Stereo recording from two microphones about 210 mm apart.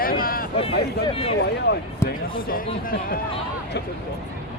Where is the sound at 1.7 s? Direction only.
50° left (ahead or behind).